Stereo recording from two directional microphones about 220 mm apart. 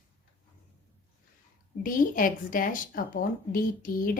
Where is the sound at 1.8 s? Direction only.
40° left (ahead or behind).